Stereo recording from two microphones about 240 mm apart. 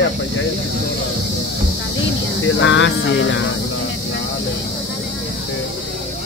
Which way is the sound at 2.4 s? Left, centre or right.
Left.